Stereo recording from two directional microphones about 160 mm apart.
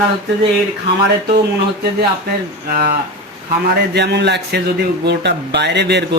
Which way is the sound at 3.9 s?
90° right.